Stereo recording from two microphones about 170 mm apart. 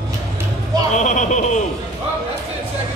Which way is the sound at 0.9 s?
45° left (ahead or behind).